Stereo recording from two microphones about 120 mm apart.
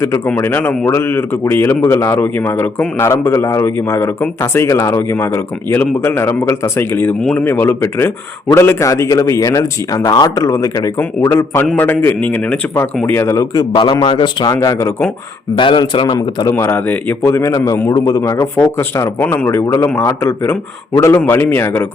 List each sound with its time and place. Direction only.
0.3 s a man's voice: 15° left (ahead or behind)
7.2 s a man's voice: 5° left (ahead or behind)
7.4 s a man's voice: 20° left (ahead or behind)
13.7 s a man's voice: 40° left (ahead or behind)
14.5 s a man's voice: 25° left (ahead or behind)
15.5 s a man's voice: 40° left (ahead or behind)
16.5 s a man's voice: 20° left (ahead or behind)